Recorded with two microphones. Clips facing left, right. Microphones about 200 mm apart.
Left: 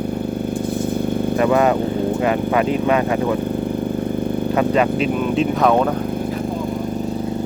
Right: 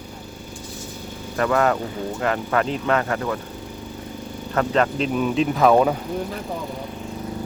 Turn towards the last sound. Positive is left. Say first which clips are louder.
# left 1 dB
turn(degrees=0)  # may be behind; listen again after turning